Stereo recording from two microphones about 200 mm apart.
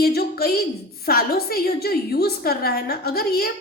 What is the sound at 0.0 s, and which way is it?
A woman's voice, 50° left (ahead or behind).